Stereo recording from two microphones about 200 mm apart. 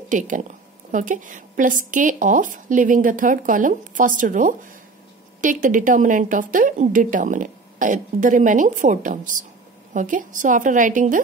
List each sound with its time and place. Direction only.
0.1 s a woman's voice: 40° right (ahead or behind)